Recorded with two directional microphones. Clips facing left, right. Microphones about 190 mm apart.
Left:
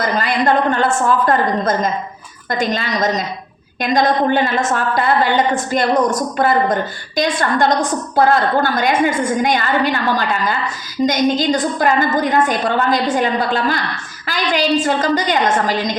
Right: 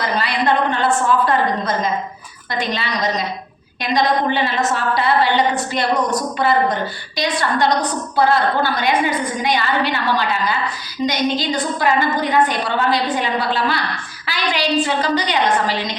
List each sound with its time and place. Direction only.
0.0 s a woman's voice: 45° left (ahead or behind)